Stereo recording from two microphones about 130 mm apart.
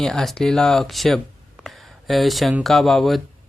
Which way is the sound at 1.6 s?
Centre (ahead or behind).